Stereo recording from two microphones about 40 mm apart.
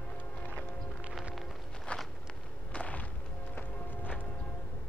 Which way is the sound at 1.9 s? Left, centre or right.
Left.